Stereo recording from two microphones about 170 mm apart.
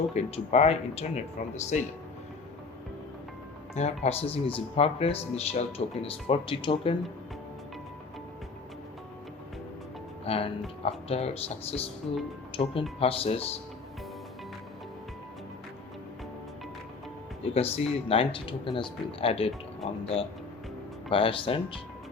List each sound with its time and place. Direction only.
0.1 s speech: 40° left (ahead or behind)
3.8 s speech: 40° left (ahead or behind)
10.2 s speech: 35° left (ahead or behind)
17.4 s speech: 35° left (ahead or behind)
21.1 s speech: 30° left (ahead or behind)